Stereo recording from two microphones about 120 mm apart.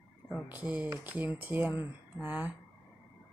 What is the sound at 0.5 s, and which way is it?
Speech, 10° right (ahead or behind).